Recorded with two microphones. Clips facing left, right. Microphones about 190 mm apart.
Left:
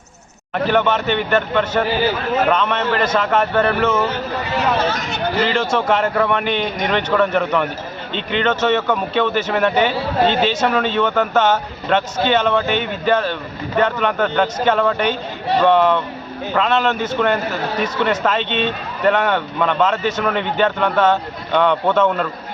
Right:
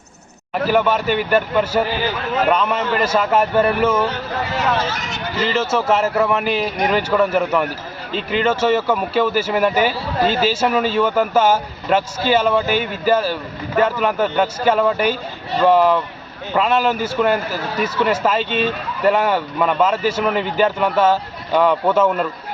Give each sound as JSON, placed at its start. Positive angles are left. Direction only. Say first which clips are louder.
{"t": 0.5, "sound": "a man's voice", "louder": "even", "side_deg": -5}
{"t": 4.5, "sound": "speech", "louder": "left 3 dB", "side_deg": 60}
{"t": 5.5, "sound": "a man's voice", "louder": "right 4 dB", "side_deg": -5}